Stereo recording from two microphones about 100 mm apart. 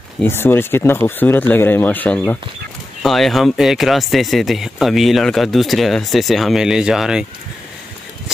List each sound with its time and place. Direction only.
0.2 s speech: 20° left (ahead or behind)
3.0 s speech: centre (ahead or behind)